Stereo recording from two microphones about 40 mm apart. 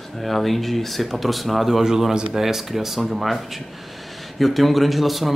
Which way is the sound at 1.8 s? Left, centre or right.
Centre.